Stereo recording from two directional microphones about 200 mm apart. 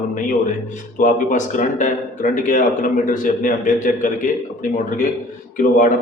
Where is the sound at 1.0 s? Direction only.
40° left (ahead or behind).